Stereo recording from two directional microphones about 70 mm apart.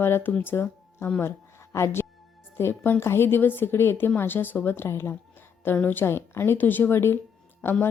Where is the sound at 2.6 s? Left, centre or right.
Left.